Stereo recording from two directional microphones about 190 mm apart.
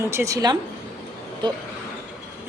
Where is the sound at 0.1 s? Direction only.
15° right (ahead or behind).